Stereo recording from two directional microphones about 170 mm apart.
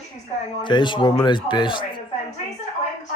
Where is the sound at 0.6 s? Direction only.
25° left (ahead or behind).